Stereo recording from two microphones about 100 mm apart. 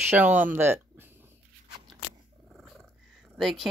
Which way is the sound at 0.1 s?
20° right (ahead or behind).